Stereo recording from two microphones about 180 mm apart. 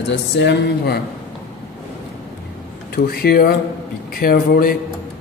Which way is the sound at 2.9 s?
60° left (ahead or behind).